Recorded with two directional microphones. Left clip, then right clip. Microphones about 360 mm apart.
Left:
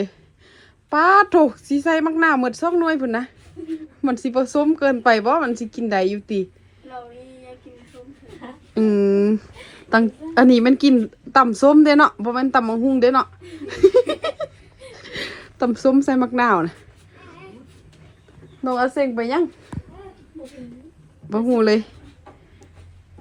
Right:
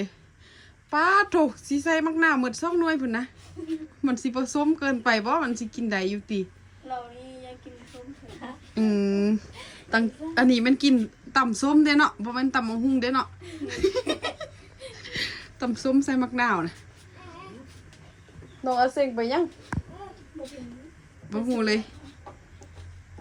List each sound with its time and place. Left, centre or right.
0.9 s a woman's voice: centre
8.7 s a woman's voice: centre
19.7 s a sound: centre
21.2 s a woman's voice: centre